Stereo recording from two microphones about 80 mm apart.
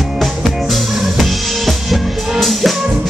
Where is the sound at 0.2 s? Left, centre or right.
Centre.